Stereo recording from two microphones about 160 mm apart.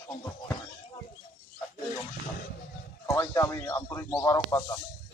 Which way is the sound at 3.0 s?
20° left (ahead or behind).